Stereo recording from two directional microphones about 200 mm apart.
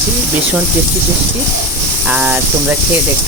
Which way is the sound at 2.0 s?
5° right (ahead or behind).